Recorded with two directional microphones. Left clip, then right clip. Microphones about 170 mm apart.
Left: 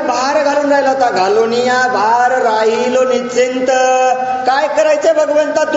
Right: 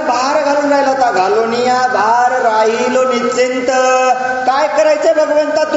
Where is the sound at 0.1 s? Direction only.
35° left (ahead or behind).